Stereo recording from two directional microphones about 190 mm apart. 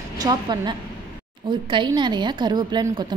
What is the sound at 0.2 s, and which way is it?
A woman's voice, 20° right (ahead or behind).